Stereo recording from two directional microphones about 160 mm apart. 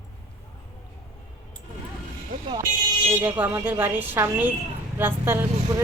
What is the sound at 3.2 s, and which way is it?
A woman's voice, 10° right (ahead or behind).